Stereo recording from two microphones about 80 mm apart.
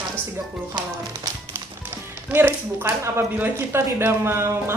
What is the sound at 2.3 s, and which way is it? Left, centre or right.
Speech, right.